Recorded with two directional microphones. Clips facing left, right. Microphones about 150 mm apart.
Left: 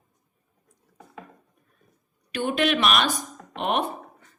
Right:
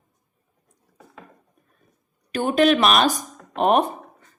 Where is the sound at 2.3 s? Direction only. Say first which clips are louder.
Right 6 dB; 40° right (ahead or behind).